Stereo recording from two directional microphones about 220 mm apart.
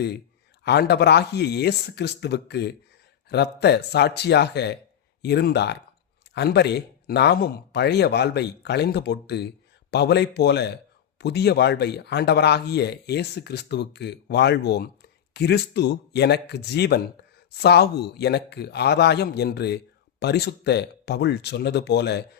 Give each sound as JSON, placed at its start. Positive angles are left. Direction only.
{"t": 0.6, "sound": "a man's voice", "side_deg": 50}